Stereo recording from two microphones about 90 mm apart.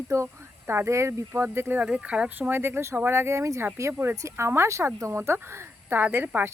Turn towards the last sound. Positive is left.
turn(degrees=-20)  # may be behind; listen again after turning